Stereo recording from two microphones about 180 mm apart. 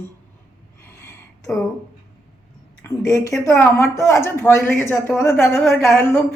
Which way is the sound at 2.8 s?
15° left (ahead or behind).